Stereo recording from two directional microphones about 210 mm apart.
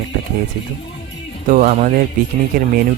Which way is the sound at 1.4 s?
40° right (ahead or behind).